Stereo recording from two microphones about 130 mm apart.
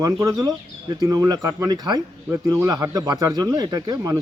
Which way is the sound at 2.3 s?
20° right (ahead or behind).